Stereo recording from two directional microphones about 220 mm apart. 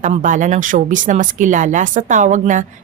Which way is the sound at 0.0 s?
35° right (ahead or behind).